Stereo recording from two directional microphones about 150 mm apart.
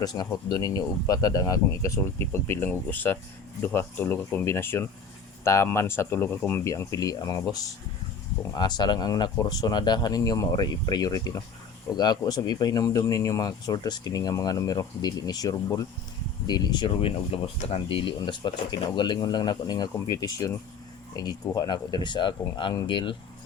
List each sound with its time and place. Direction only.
0.0 s speech: 25° left (ahead or behind)
8.5 s speech: 30° left (ahead or behind)